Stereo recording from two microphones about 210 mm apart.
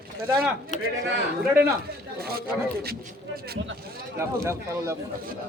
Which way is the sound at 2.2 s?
45° right (ahead or behind).